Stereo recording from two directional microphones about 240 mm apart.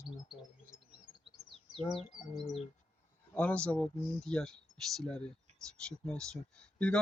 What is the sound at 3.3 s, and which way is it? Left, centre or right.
Speech, centre.